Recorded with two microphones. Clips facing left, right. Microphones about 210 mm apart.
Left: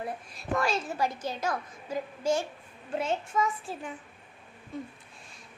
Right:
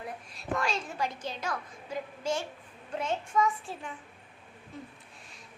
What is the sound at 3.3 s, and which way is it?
Speech, 20° left (ahead or behind).